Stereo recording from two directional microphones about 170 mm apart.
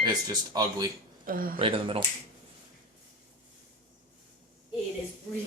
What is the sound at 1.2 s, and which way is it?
Speech, 55° right (ahead or behind).